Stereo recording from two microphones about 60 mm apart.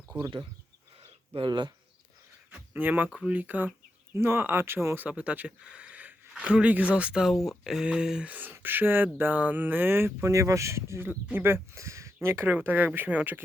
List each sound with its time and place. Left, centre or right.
2.5 s a sound: right
3.1 s a sound: centre
3.3 s speech: right
4.1 s speech: right
4.9 s speech: right
6.9 s a sound: centre
7.3 s speech: centre
7.9 s a sound: centre
8.3 s speech: right
10.3 s speech: right
11.0 s speech: right
11.7 s speech: right
12.5 s speech: right